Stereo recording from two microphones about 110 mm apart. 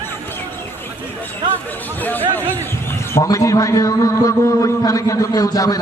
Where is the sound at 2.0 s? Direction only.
15° left (ahead or behind).